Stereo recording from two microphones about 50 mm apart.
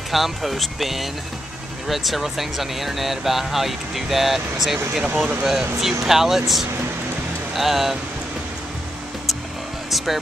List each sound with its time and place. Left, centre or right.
0.1 s speech: centre
5.0 s speech: centre
9.8 s speech: centre